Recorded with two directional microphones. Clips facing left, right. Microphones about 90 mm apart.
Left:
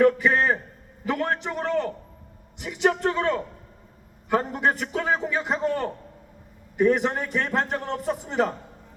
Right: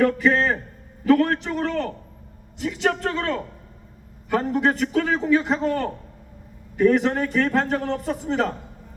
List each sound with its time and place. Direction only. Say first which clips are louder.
0.0 s a man's voice: even; 15° left (ahead or behind)